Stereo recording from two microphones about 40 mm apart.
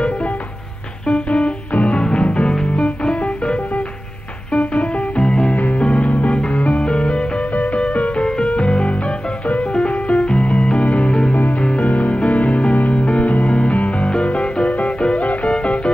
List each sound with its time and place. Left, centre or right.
1.0 s music: left
2.0 s music: left
4.6 s music: left
11.6 s music: left